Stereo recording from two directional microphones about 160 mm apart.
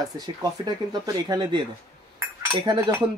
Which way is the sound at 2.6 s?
30° right (ahead or behind).